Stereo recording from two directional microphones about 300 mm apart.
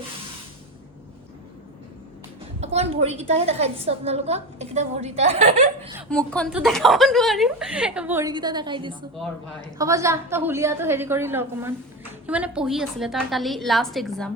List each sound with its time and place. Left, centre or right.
2.7 s a woman's voice: right
6.0 s a woman's voice: centre